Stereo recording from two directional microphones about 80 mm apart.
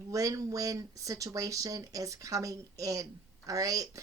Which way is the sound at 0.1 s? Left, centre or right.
Right.